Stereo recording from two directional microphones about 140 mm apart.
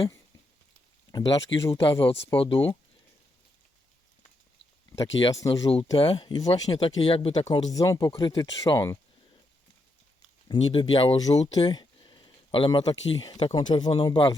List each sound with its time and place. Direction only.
1.1 s speech: 25° left (ahead or behind)
1.9 s speech: 40° left (ahead or behind)
5.3 s speech: 25° left (ahead or behind)
6.0 s speech: 35° left (ahead or behind)
7.7 s speech: 25° left (ahead or behind)
10.5 s speech: 35° left (ahead or behind)
11.2 s speech: 25° left (ahead or behind)